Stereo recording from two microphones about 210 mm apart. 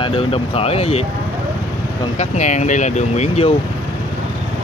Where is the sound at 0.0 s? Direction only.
25° left (ahead or behind).